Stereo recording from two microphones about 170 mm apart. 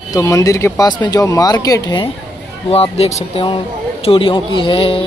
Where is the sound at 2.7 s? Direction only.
35° left (ahead or behind).